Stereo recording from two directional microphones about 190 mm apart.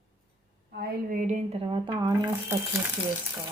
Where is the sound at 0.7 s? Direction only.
55° right (ahead or behind).